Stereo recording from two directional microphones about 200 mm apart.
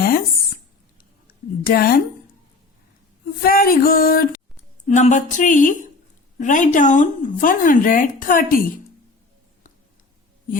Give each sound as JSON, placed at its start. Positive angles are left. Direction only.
{"t": 0.9, "sound": "a sound", "side_deg": 45}
{"t": 3.4, "sound": "speech", "side_deg": 45}
{"t": 4.9, "sound": "speech", "side_deg": 35}